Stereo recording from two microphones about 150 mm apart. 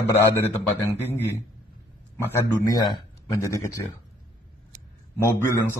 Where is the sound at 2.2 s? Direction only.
15° left (ahead or behind).